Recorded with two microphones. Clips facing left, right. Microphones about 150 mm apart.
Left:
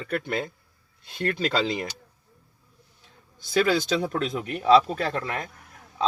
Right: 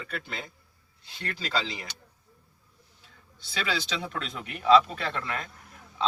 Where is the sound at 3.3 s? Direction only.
50° left (ahead or behind).